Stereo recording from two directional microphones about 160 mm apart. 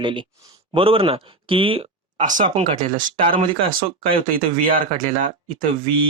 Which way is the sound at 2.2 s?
50° right (ahead or behind).